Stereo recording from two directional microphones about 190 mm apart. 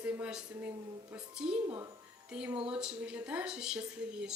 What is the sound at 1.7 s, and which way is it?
Speech, 25° right (ahead or behind).